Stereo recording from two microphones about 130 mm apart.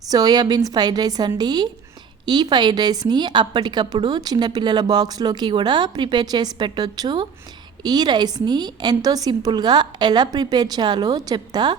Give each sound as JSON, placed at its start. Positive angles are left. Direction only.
{"t": 0.1, "sound": "a woman's voice", "side_deg": -30}